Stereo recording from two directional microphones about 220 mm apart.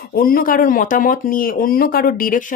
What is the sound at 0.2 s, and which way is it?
Speech, 40° left (ahead or behind).